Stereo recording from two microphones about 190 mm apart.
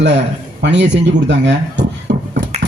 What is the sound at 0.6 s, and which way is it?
Speech, 70° right (ahead or behind).